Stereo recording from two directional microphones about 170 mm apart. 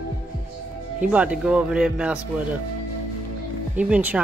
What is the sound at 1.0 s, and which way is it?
Speech, 5° right (ahead or behind).